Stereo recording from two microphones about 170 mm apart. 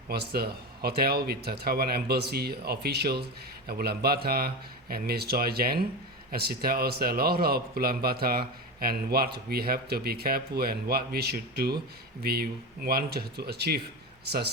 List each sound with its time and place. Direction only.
0.1 s a man's voice: 70° right (ahead or behind)